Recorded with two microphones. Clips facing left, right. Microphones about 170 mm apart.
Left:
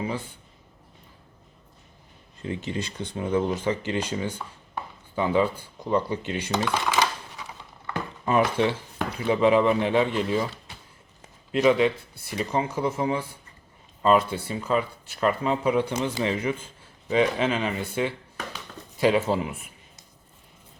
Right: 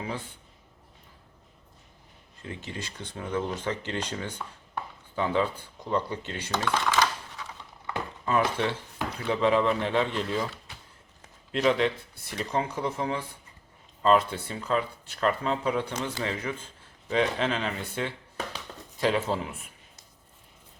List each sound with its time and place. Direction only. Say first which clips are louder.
2.4 s speech: left 8 dB; 20° left (ahead or behind)
11.5 s speech: left 4 dB; 5° left (ahead or behind)